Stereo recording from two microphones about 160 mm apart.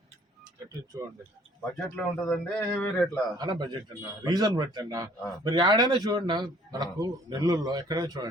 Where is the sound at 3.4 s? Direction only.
25° right (ahead or behind).